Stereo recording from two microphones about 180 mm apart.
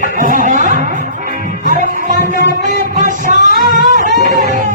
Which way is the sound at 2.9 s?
45° right (ahead or behind).